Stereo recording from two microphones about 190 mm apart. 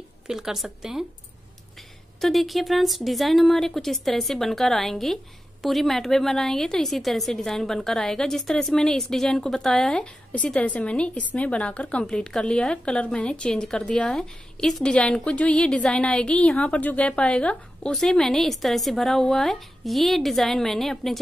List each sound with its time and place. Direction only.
0.3 s speech: centre (ahead or behind)
2.2 s speech: centre (ahead or behind)